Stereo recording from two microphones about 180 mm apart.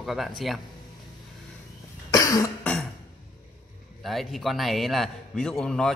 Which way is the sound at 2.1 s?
20° left (ahead or behind).